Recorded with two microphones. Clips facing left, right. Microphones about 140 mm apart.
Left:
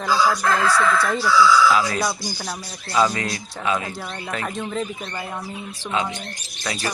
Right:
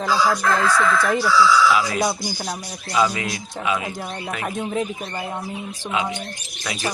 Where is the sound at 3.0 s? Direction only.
10° right (ahead or behind).